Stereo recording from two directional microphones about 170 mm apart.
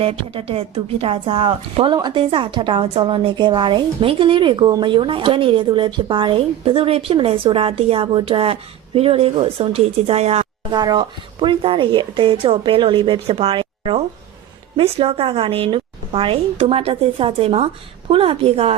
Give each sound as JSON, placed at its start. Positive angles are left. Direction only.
{"t": 0.0, "sound": "a woman's voice", "side_deg": -35}
{"t": 10.7, "sound": "a woman's voice", "side_deg": -25}